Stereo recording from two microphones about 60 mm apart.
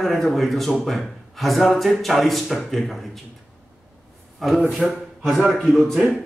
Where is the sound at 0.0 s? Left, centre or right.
Centre.